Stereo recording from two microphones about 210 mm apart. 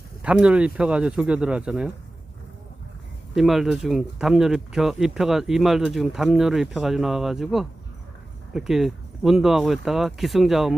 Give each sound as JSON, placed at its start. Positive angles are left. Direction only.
{"t": 0.2, "sound": "speech", "side_deg": -5}
{"t": 3.3, "sound": "speech", "side_deg": 0}